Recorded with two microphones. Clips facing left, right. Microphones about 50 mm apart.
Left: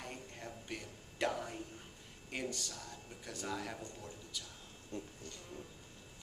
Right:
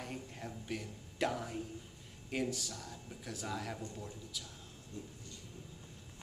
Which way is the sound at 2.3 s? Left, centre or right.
Centre.